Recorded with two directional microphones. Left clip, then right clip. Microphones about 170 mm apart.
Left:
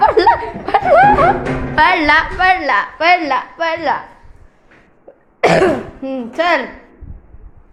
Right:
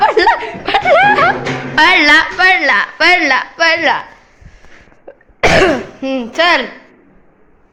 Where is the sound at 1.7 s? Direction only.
Centre (ahead or behind).